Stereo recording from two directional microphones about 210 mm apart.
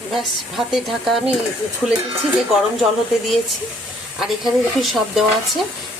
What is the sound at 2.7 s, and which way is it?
Speech, centre (ahead or behind).